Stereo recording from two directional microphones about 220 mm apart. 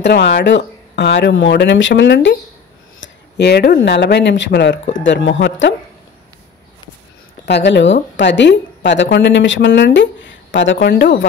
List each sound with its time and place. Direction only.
0.0 s a woman's voice: 50° left (ahead or behind)
7.4 s a woman's voice: 50° left (ahead or behind)